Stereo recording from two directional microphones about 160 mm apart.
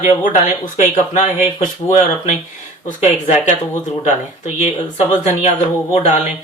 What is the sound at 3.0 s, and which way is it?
Speech, 40° left (ahead or behind).